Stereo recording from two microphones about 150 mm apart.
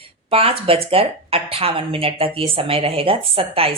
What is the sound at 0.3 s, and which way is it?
Speech, 40° right (ahead or behind).